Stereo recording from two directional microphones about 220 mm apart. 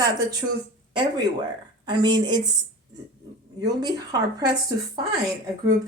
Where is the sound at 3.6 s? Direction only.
20° right (ahead or behind).